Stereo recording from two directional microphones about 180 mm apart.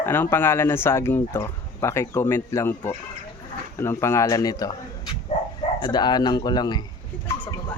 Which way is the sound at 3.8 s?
15° left (ahead or behind).